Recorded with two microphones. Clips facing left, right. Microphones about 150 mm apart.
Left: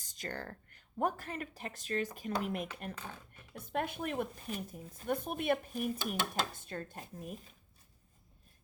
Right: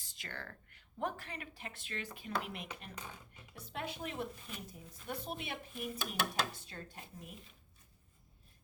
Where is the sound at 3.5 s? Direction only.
50° left (ahead or behind).